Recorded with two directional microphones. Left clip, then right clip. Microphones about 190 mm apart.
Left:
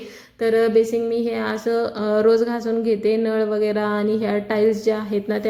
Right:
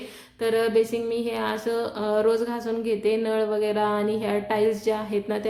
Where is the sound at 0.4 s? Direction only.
20° left (ahead or behind).